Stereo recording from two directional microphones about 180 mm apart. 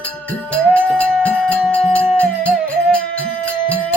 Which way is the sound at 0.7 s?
5° left (ahead or behind).